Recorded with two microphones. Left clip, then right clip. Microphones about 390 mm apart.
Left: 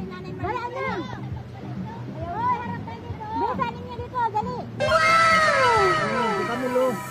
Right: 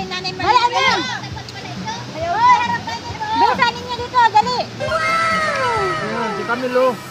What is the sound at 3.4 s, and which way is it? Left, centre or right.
Speech, right.